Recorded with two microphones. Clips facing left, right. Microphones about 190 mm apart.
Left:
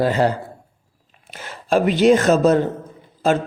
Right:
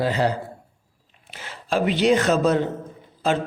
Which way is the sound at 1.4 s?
45° left (ahead or behind).